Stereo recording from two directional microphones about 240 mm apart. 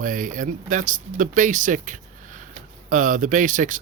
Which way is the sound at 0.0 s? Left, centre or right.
Right.